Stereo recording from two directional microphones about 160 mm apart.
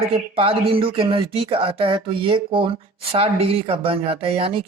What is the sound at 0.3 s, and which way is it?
Speech, 35° right (ahead or behind).